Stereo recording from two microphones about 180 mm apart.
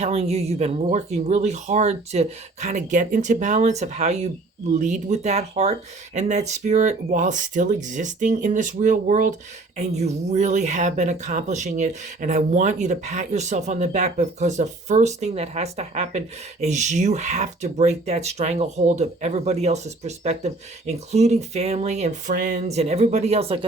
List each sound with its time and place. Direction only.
0.0 s speech: 35° right (ahead or behind)